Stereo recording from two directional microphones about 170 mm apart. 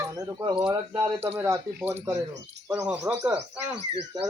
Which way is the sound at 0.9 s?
10° right (ahead or behind).